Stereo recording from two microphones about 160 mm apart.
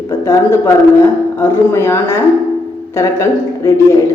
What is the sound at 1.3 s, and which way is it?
A woman's voice, 15° left (ahead or behind).